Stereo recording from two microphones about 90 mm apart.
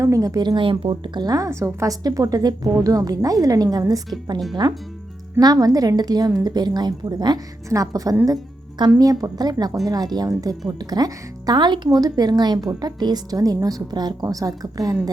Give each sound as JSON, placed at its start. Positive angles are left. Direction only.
{"t": 0.0, "sound": "a woman's voice", "side_deg": -40}
{"t": 1.5, "sound": "a woman's voice", "side_deg": -35}
{"t": 5.4, "sound": "a woman's voice", "side_deg": -45}
{"t": 7.7, "sound": "a woman's voice", "side_deg": -40}
{"t": 11.9, "sound": "a woman's voice", "side_deg": -45}